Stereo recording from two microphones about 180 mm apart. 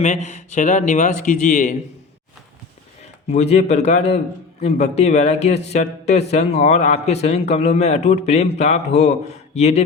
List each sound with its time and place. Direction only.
0.0 s speech: 40° left (ahead or behind)
3.2 s speech: 35° left (ahead or behind)